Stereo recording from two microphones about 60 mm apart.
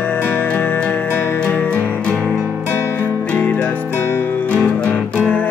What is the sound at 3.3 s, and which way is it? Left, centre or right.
Music, left.